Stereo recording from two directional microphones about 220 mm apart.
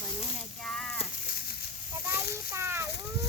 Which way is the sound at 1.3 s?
45° left (ahead or behind).